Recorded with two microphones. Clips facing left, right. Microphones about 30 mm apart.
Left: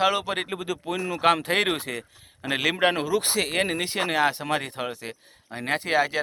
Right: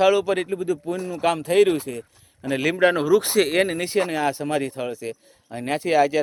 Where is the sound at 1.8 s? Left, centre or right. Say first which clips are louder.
Right 1 dB; left.